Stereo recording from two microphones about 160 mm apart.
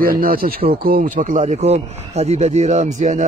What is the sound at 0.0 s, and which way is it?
Speech, 65° right (ahead or behind).